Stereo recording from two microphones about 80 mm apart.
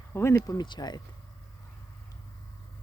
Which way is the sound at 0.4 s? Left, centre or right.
Left.